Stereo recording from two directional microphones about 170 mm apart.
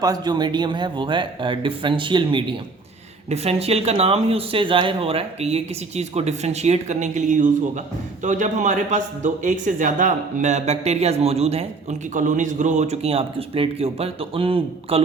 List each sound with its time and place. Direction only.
0.0 s a man's voice: 25° right (ahead or behind)